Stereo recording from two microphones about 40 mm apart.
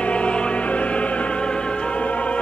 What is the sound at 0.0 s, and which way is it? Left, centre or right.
Music, left.